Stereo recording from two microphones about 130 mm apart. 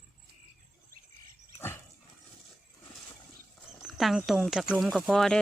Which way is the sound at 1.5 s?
20° left (ahead or behind).